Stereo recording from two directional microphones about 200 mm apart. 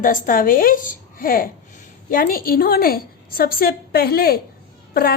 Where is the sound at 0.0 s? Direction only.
45° left (ahead or behind).